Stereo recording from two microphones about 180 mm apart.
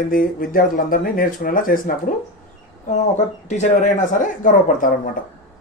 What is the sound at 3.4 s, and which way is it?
Speech, 40° left (ahead or behind).